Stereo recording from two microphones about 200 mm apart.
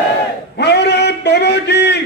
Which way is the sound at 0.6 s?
55° left (ahead or behind).